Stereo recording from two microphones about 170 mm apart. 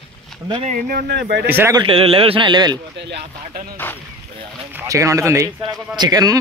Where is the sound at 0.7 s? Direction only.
55° right (ahead or behind); by 1.5 s 75° right (ahead or behind).